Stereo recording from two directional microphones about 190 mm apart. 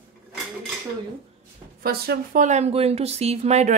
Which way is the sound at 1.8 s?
55° right (ahead or behind).